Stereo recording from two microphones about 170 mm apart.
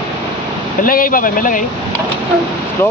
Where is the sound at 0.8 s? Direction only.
55° left (ahead or behind).